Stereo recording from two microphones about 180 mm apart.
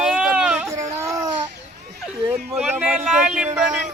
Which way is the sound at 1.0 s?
15° right (ahead or behind).